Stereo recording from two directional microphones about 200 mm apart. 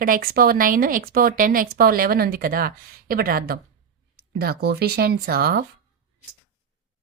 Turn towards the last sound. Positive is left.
turn(degrees=-50)  # may be behind; listen again after turning